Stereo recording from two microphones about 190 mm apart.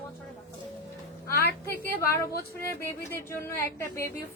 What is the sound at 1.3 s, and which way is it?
Speech, 55° left (ahead or behind).